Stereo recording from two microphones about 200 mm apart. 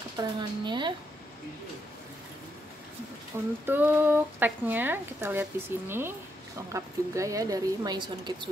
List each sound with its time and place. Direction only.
0.2 s speech: 20° right (ahead or behind)
3.6 s speech: 10° right (ahead or behind)